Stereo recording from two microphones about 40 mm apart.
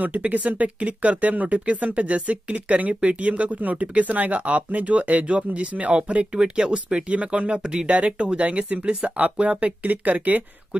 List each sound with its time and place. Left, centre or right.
0.0 s speech: right